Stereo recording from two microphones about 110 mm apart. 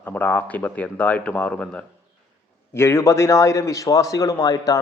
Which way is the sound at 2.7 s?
25° left (ahead or behind).